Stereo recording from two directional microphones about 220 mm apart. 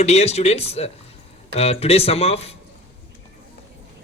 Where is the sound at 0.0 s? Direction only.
30° left (ahead or behind).